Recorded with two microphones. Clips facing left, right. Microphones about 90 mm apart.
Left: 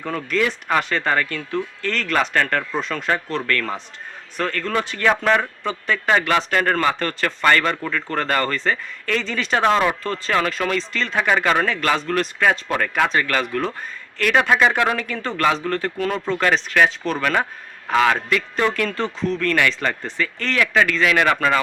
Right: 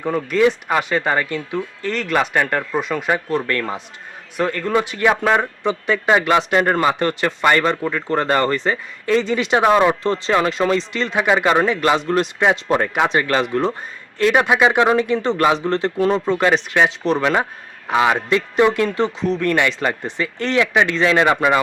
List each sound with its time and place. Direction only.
0.0 s a man's voice: 15° right (ahead or behind)